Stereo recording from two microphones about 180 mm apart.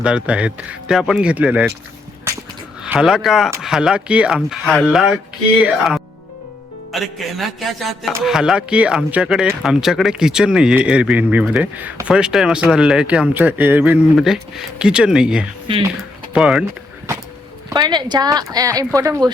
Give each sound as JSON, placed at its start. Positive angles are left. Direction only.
{"t": 0.0, "sound": "speech", "side_deg": -5}
{"t": 2.8, "sound": "a man's voice", "side_deg": -5}
{"t": 15.7, "sound": "speech", "side_deg": -30}
{"t": 16.3, "sound": "a man's voice", "side_deg": -5}
{"t": 17.7, "sound": "speech", "side_deg": -25}